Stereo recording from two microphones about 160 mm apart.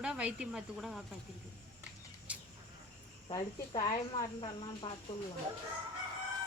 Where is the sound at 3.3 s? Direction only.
30° left (ahead or behind).